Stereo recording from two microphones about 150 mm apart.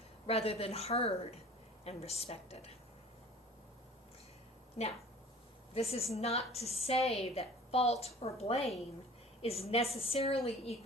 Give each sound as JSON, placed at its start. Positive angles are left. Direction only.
{"t": 0.3, "sound": "a woman's voice", "side_deg": 40}
{"t": 4.8, "sound": "a woman's voice", "side_deg": 40}